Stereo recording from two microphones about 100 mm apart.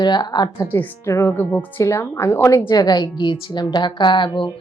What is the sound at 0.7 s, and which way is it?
Speech, 25° left (ahead or behind).